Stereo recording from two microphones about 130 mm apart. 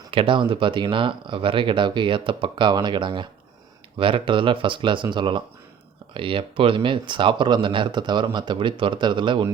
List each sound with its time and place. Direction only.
0.1 s speech: 40° right (ahead or behind)